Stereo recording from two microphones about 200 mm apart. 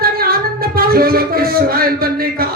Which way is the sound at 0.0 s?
50° right (ahead or behind).